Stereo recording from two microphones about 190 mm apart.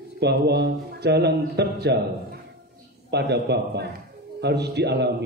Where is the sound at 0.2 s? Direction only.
60° right (ahead or behind).